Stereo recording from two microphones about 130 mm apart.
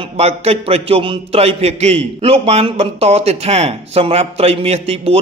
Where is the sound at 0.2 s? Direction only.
50° right (ahead or behind).